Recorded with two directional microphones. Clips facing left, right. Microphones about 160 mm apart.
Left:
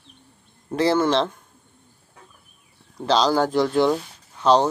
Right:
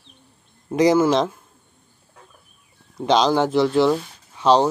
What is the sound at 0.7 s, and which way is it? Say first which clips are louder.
Speech: right 3 dB; 10° right (ahead or behind).